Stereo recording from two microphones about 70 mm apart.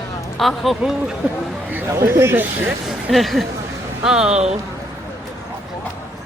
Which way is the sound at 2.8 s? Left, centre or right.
Centre.